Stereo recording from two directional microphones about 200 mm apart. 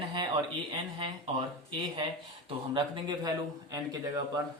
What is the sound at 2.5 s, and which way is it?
A man's voice, 25° right (ahead or behind).